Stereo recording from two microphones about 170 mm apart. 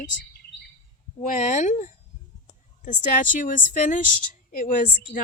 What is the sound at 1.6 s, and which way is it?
A woman's voice, 45° left (ahead or behind).